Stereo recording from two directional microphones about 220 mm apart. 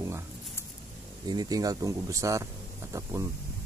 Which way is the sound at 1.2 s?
20° right (ahead or behind).